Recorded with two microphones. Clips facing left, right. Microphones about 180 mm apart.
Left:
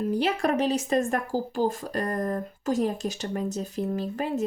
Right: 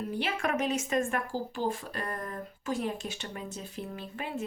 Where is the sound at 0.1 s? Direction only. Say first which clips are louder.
Left 6 dB; 40° left (ahead or behind).